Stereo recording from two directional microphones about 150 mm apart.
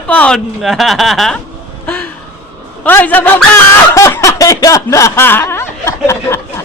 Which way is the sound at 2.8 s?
10° left (ahead or behind).